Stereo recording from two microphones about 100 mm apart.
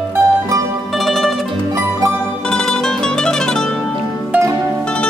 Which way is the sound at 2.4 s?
5° left (ahead or behind).